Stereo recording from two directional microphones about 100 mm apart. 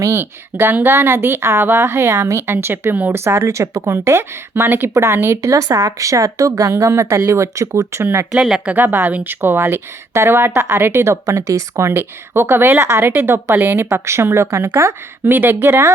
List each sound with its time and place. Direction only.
0.0 s a woman's voice: 30° right (ahead or behind)
0.5 s a woman's voice: 20° right (ahead or behind)
5.4 s speech: 35° right (ahead or behind)
8.3 s speech: 5° right (ahead or behind)
8.7 s a woman's voice: 20° right (ahead or behind)